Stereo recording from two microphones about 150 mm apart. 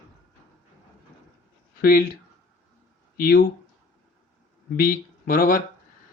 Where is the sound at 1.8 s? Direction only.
90° left.